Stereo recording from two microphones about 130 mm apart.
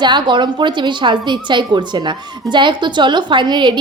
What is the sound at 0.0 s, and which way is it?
A woman's voice, 35° right (ahead or behind).